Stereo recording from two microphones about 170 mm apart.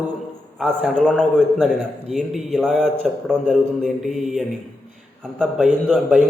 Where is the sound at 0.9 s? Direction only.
5° left (ahead or behind).